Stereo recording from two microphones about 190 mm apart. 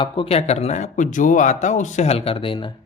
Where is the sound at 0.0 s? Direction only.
30° left (ahead or behind).